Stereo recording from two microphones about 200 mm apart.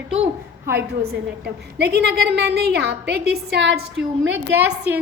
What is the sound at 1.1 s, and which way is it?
A woman's voice, 55° right (ahead or behind).